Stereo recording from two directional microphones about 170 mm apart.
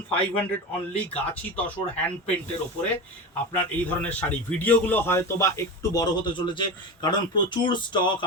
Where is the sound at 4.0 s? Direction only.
10° left (ahead or behind); by 8.2 s 25° left (ahead or behind).